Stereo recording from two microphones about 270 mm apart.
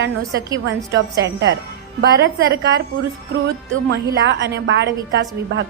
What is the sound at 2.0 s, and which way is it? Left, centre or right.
Speech, right.